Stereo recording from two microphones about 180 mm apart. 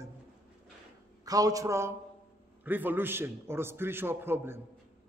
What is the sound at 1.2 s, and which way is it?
A man's voice, 20° right (ahead or behind).